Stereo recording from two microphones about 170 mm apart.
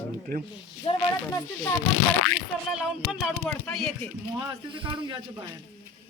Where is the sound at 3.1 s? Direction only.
5° right (ahead or behind).